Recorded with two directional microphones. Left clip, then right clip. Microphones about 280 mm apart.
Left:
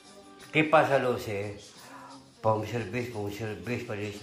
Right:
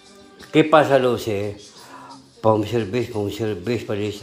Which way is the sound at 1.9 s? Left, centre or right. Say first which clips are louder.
Right 8 dB; right.